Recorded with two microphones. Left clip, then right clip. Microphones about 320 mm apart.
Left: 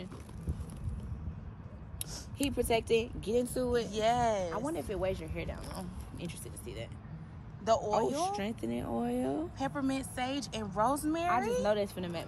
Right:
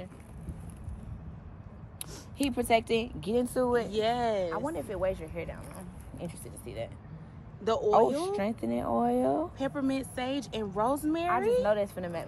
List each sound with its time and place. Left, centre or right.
2.3 s a woman's voice: centre
3.9 s speech: centre
6.1 s a woman's voice: centre
7.6 s speech: centre
8.4 s a woman's voice: centre
9.6 s speech: centre